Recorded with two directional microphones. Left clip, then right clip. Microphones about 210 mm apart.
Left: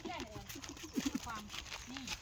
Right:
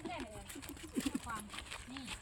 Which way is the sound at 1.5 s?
20° left (ahead or behind).